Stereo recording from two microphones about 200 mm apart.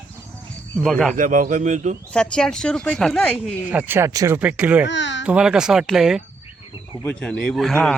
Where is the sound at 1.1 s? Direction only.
40° right (ahead or behind).